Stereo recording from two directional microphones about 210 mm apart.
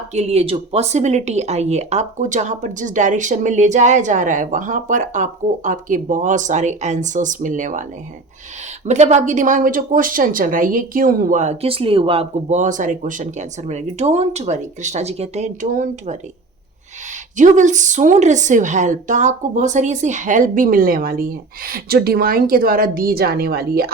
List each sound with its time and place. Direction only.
0.1 s speech: 30° right (ahead or behind)
8.9 s speech: 35° right (ahead or behind)
17.3 s speech: 35° right (ahead or behind)